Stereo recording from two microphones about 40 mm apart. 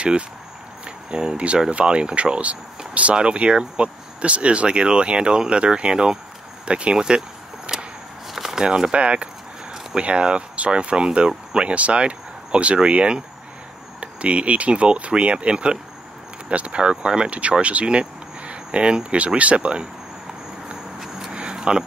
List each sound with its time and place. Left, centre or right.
0.8 s speech: right
6.6 s vehicle: right
8.3 s speech: centre; by 19.9 s right
21.3 s a sound: right